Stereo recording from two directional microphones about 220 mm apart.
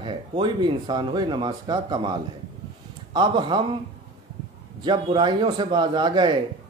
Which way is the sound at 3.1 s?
20° right (ahead or behind).